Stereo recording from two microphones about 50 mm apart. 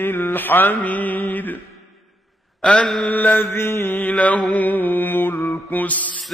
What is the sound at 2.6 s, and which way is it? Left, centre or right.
Mantra, left.